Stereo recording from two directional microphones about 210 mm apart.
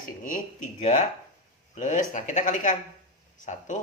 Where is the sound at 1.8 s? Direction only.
35° left (ahead or behind).